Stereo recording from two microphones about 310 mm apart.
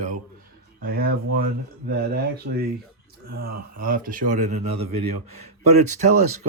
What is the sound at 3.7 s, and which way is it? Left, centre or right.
Speech, right.